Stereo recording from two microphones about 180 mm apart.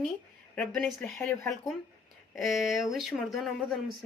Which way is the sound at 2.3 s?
Centre (ahead or behind).